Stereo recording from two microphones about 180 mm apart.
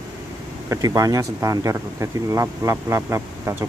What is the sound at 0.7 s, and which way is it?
Speech, 20° right (ahead or behind).